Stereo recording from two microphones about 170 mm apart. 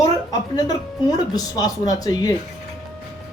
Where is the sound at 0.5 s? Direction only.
20° left (ahead or behind).